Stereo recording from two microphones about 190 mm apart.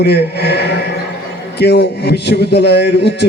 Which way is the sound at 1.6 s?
60° left (ahead or behind).